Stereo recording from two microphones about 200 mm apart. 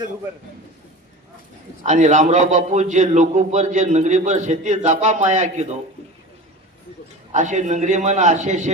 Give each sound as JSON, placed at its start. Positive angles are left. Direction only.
{"t": 1.8, "sound": "a man's voice", "side_deg": -35}
{"t": 7.3, "sound": "a man's voice", "side_deg": -35}